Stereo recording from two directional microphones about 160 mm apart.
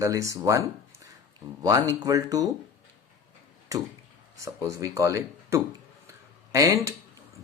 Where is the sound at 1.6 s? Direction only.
20° right (ahead or behind).